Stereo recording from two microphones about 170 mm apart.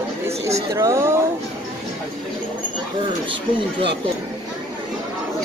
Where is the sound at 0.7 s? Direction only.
15° right (ahead or behind).